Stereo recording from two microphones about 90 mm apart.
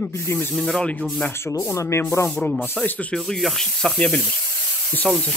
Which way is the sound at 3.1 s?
5° left (ahead or behind).